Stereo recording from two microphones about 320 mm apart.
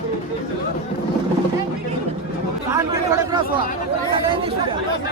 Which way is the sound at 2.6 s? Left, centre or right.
Centre.